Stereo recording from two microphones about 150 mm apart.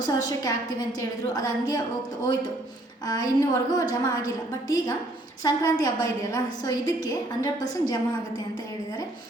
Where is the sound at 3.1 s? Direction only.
25° left (ahead or behind).